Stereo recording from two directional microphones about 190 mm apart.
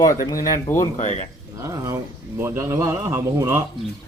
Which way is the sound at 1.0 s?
35° left (ahead or behind).